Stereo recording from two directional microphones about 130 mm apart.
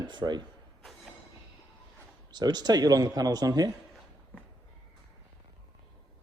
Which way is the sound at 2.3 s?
35° right (ahead or behind).